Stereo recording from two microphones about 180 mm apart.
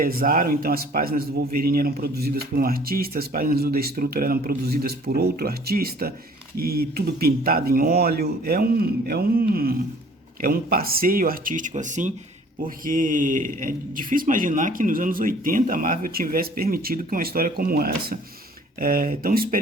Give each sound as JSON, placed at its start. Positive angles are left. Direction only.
{"t": 0.0, "sound": "speech", "side_deg": -55}